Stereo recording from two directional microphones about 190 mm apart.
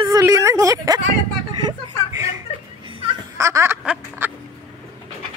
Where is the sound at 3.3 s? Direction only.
15° right (ahead or behind).